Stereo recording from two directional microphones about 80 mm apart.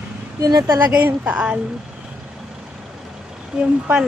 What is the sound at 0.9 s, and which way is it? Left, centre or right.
Speech, centre.